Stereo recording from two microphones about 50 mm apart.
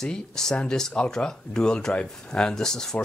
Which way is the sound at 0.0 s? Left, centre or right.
Centre.